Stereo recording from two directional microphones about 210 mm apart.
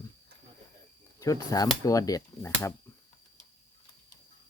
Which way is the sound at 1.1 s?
15° left (ahead or behind).